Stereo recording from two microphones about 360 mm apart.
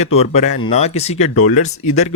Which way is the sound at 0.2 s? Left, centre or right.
Centre.